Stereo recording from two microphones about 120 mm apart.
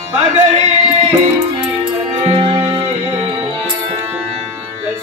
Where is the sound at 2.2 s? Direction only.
50° right (ahead or behind).